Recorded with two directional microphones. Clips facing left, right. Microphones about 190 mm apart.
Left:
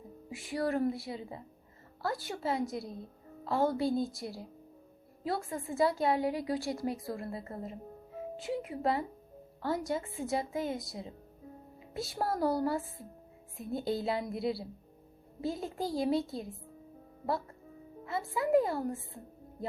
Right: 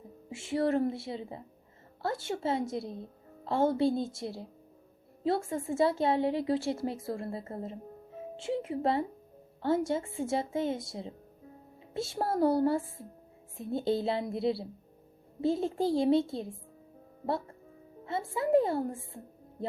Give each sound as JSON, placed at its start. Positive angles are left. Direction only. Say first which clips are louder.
{"t": 0.3, "sound": "a woman's voice", "louder": "right 4 dB", "side_deg": -25}
{"t": 18.0, "sound": "a woman's voice", "louder": "right 1 dB", "side_deg": -30}